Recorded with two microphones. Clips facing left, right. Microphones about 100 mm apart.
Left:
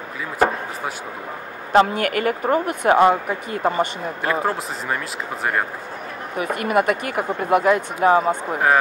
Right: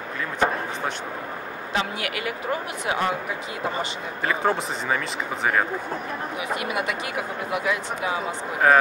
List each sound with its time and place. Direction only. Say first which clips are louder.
1.7 s speech: left 11 dB; 50° left (ahead or behind)
4.2 s speech: left 1 dB; centre (ahead or behind)
6.3 s speech: left 9 dB; 50° left (ahead or behind)